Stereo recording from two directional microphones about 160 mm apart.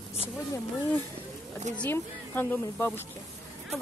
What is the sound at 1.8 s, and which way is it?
A woman's voice, 10° left (ahead or behind).